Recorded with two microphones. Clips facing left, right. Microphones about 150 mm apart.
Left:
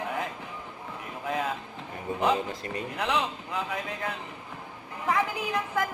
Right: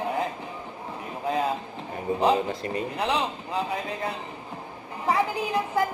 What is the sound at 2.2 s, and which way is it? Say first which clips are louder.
A woman's voice: right 3 dB; 30° right (ahead or behind).